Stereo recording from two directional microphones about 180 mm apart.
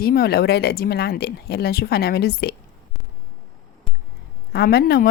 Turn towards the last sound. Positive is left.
turn(degrees=55)  # may be behind; listen again after turning